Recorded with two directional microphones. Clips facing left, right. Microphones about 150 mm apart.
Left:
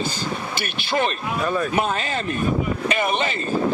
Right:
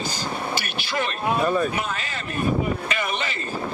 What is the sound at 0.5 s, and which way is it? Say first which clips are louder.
Speech: left 3 dB; 25° left (ahead or behind).